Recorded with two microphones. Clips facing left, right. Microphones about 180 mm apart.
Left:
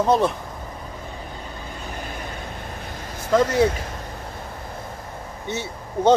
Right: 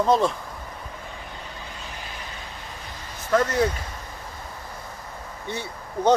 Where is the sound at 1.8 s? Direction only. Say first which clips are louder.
Left 5 dB; 50° left (ahead or behind).